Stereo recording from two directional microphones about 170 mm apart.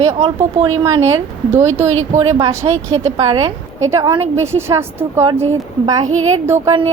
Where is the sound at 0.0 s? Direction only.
40° right (ahead or behind).